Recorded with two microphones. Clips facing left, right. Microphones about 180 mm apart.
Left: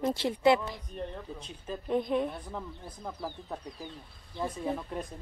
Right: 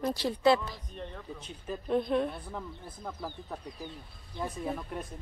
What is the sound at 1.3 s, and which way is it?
Speech, 10° right (ahead or behind).